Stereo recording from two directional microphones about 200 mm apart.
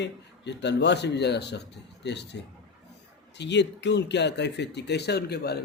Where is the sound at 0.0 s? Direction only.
60° left (ahead or behind).